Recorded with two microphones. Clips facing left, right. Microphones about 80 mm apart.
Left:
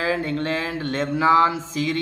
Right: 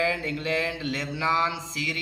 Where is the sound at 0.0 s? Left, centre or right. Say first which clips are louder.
Left 4 dB; left.